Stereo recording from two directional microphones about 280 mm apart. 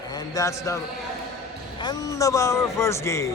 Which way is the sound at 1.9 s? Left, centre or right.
Centre.